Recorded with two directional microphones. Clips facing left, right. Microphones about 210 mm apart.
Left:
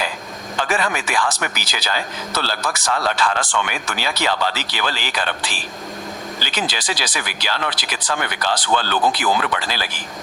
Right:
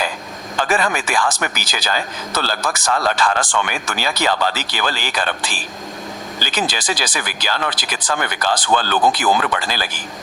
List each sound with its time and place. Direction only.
0.7 s speech: 45° right (ahead or behind)